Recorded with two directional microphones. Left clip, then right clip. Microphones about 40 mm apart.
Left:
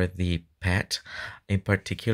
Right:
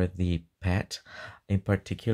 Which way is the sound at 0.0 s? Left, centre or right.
Centre.